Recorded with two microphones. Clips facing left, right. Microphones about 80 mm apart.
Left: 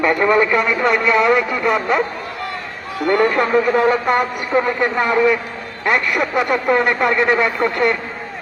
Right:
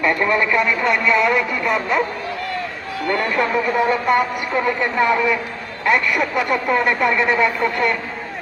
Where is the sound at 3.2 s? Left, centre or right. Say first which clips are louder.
Left 3 dB; left.